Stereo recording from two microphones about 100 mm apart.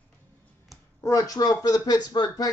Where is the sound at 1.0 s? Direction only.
30° left (ahead or behind).